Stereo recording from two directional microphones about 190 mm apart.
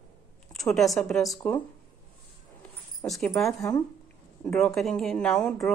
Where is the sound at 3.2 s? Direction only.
5° left (ahead or behind).